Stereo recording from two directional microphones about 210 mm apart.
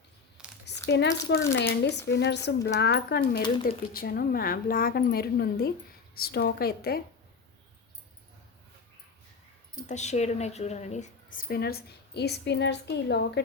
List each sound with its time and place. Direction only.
0.6 s a woman's voice: 55° left (ahead or behind)
9.8 s a woman's voice: 35° left (ahead or behind); by 13.4 s 55° left (ahead or behind)